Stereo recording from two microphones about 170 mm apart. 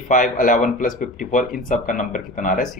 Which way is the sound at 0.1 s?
50° left (ahead or behind).